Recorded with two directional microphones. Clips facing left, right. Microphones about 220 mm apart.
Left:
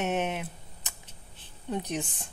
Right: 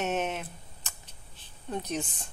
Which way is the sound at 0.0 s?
15° left (ahead or behind).